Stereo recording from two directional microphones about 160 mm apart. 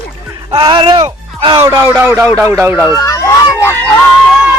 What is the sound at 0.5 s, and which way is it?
Speech, 30° right (ahead or behind).